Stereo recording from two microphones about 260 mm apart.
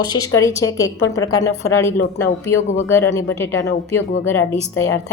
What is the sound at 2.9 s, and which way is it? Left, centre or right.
Speech, centre.